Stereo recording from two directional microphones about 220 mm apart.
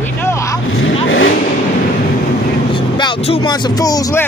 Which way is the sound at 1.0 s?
60° left (ahead or behind).